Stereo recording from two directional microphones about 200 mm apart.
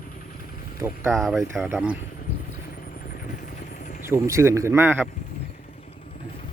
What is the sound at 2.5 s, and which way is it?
Vehicle, 45° left (ahead or behind).